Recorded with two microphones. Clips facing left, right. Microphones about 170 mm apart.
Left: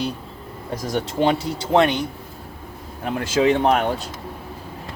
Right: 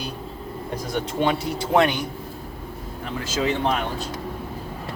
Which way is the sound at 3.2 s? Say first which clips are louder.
Left 6 dB; 60° left (ahead or behind).